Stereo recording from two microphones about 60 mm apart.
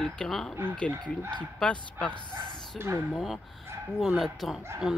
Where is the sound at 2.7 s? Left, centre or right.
Right.